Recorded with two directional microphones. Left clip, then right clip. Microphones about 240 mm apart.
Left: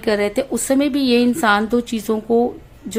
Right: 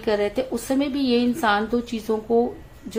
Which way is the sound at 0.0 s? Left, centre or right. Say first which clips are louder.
Left 4 dB; left.